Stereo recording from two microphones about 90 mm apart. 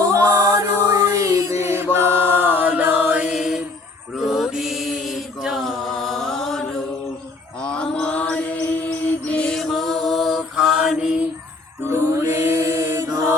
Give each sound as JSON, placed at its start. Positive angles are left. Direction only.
{"t": 0.1, "sound": "music", "side_deg": -40}
{"t": 4.1, "sound": "mantra", "side_deg": -5}
{"t": 11.9, "sound": "mantra", "side_deg": -30}